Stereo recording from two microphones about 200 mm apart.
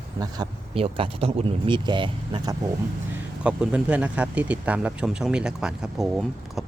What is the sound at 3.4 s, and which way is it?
Speech, 5° right (ahead or behind).